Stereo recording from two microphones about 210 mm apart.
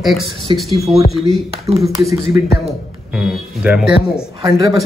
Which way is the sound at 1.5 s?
30° right (ahead or behind).